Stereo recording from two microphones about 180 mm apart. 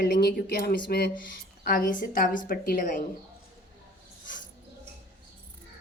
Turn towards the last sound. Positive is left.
turn(degrees=45)  # may be behind; listen again after turning